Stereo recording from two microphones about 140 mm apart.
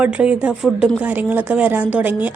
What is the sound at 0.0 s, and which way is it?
Speech, 10° right (ahead or behind).